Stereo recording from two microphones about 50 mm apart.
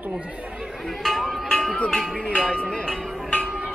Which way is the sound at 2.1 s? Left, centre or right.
Left.